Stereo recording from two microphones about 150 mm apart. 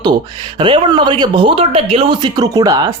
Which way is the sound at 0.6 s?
30° right (ahead or behind).